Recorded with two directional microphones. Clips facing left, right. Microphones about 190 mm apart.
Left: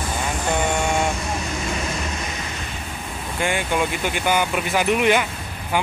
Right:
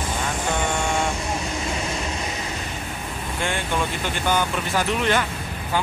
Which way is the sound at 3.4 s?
10° left (ahead or behind).